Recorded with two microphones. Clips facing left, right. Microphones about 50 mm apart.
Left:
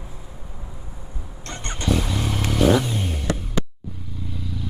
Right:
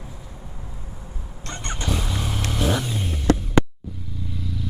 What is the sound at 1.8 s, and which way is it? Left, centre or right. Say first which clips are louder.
Vehicle: left 5 dB; left.